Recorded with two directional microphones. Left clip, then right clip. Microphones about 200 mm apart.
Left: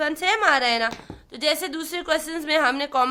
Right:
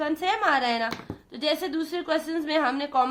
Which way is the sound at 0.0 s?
35° left (ahead or behind).